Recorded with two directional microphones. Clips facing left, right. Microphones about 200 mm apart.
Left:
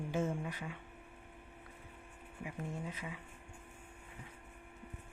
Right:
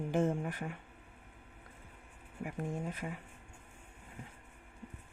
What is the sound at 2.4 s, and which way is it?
Speech, 50° right (ahead or behind).